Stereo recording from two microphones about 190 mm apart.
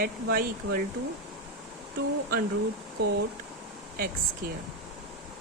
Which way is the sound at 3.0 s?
60° right (ahead or behind).